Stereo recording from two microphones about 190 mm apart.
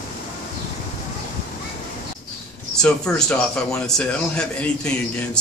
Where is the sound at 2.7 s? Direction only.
5° left (ahead or behind).